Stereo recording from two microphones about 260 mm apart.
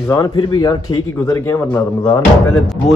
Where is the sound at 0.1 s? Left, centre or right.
Centre.